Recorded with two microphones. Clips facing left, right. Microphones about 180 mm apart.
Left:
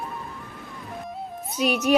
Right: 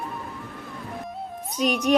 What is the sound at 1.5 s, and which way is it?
Speech, 5° left (ahead or behind).